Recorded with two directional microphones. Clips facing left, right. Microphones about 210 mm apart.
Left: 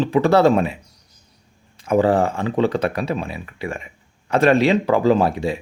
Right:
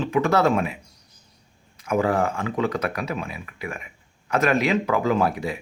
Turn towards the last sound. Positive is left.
turn(degrees=30)  # may be behind; listen again after turning